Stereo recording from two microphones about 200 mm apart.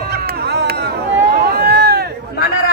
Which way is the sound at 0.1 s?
55° right (ahead or behind).